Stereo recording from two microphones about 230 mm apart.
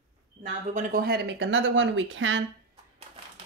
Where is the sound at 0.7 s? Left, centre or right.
Right.